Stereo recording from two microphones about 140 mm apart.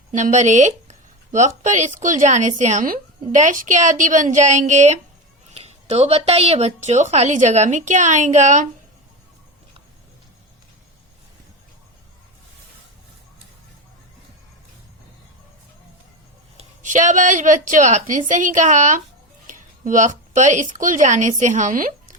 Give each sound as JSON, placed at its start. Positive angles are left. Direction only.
{"t": 0.1, "sound": "a woman's voice", "side_deg": -60}
{"t": 5.5, "sound": "a woman's voice", "side_deg": -50}
{"t": 16.8, "sound": "a woman's voice", "side_deg": -65}